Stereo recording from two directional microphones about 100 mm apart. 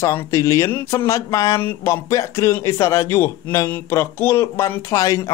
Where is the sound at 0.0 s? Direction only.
30° left (ahead or behind).